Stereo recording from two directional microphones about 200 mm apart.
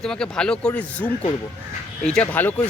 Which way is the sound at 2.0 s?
5° left (ahead or behind).